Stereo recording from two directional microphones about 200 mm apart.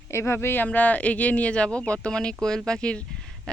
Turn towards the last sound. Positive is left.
turn(degrees=5)  # may be behind; listen again after turning